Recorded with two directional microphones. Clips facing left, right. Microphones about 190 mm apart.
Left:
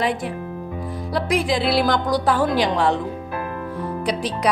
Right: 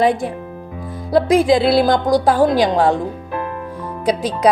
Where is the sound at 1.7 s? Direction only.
25° right (ahead or behind).